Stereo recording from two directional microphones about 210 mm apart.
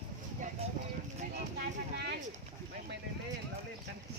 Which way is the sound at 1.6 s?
50° right (ahead or behind).